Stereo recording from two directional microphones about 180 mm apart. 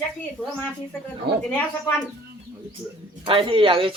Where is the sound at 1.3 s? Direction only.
65° right (ahead or behind).